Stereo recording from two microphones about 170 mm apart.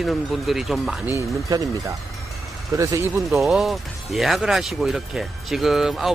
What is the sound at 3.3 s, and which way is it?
Speech, centre (ahead or behind).